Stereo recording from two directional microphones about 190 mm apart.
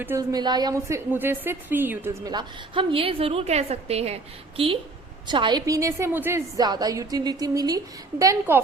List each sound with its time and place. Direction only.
0.0 s a woman's voice: 15° right (ahead or behind)